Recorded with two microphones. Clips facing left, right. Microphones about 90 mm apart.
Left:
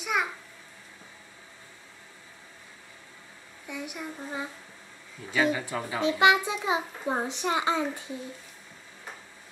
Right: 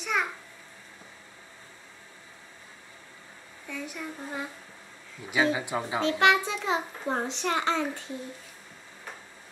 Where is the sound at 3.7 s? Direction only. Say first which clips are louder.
Even; 15° left (ahead or behind).